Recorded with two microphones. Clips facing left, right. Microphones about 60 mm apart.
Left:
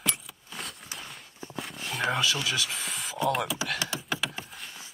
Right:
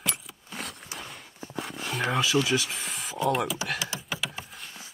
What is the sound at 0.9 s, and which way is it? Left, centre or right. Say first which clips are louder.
Clip-clop: right 2 dB; centre.